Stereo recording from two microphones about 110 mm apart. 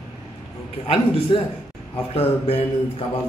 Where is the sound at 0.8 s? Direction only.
55° left (ahead or behind).